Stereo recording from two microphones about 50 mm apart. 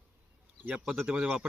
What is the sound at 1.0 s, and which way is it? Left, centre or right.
Speech, centre.